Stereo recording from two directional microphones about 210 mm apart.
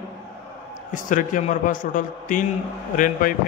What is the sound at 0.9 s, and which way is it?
A man's voice, 40° left (ahead or behind).